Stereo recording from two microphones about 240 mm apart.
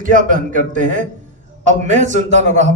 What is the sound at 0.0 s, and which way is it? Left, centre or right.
A man's voice, right.